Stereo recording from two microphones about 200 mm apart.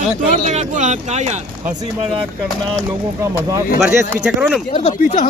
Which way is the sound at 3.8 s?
5° right (ahead or behind).